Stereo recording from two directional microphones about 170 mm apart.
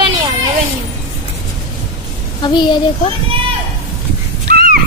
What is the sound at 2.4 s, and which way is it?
Speech, 25° left (ahead or behind).